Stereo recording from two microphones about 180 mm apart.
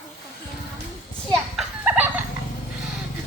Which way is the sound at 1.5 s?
5° right (ahead or behind).